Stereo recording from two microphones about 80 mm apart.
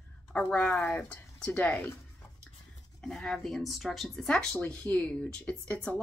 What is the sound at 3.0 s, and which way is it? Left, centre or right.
A woman's voice, centre.